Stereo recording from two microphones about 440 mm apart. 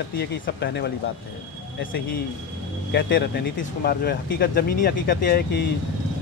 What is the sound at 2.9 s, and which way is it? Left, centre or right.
Speech, left.